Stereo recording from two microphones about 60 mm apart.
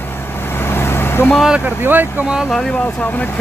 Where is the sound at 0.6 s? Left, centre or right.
Left.